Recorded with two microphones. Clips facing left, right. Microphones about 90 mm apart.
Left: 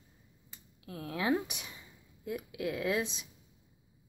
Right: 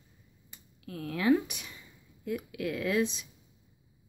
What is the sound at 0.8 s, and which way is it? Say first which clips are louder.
Speech: right 5 dB; 20° left (ahead or behind).